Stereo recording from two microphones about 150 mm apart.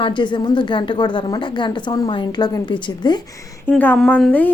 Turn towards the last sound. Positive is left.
turn(degrees=10)  # may be behind; listen again after turning